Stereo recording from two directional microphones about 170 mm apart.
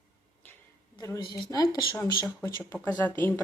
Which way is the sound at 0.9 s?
20° left (ahead or behind).